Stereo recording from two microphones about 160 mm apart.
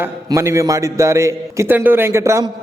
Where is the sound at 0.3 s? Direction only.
20° right (ahead or behind).